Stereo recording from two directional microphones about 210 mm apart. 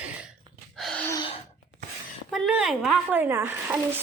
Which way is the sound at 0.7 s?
5° left (ahead or behind).